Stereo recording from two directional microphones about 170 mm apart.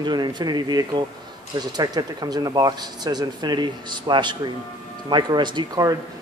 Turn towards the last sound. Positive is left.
turn(degrees=-25)  # may be behind; listen again after turning